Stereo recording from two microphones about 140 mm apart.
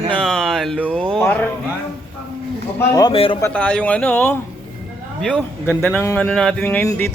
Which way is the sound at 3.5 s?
10° left (ahead or behind).